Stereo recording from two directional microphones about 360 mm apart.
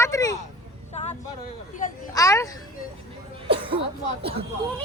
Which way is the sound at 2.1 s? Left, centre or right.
Centre.